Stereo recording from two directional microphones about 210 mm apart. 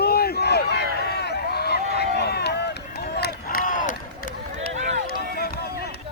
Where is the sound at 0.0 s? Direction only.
50° left (ahead or behind).